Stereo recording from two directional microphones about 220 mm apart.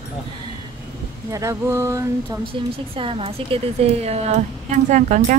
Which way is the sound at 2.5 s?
25° right (ahead or behind).